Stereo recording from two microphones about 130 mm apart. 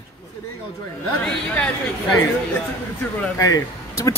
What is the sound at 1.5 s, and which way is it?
Speech, 5° left (ahead or behind).